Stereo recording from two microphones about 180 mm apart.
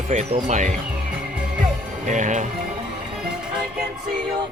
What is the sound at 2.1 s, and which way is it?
Speech, 40° right (ahead or behind).